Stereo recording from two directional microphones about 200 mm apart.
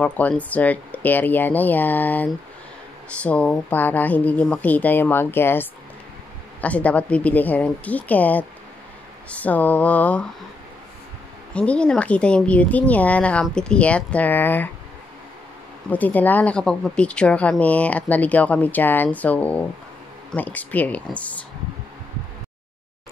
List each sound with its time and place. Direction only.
0.0 s speech: 5° left (ahead or behind)
11.5 s speech: 5° left (ahead or behind)
15.9 s speech: 10° left (ahead or behind)